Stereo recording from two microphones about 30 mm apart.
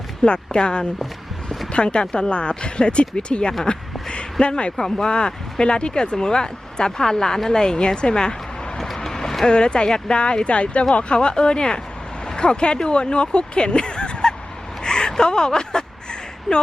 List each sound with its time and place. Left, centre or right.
0.3 s speech: left
4.1 s a sound: left
4.8 s speech: left
9.0 s clip-clop: centre
9.5 s speech: left
14.8 s a sound: left